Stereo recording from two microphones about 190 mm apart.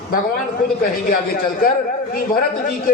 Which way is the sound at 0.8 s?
50° left (ahead or behind).